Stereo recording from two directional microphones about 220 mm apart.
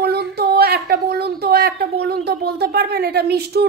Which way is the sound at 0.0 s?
45° right (ahead or behind).